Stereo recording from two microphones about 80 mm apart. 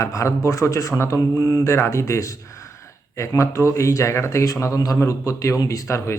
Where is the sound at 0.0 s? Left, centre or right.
Left.